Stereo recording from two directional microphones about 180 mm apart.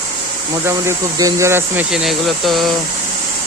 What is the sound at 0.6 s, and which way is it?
Speech, 15° right (ahead or behind).